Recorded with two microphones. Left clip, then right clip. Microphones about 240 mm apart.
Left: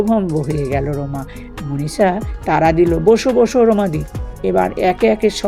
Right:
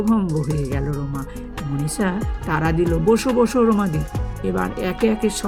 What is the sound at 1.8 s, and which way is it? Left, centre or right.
Speech, centre.